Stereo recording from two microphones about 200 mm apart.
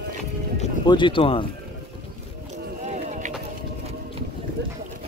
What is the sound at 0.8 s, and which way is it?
Speech, 25° left (ahead or behind).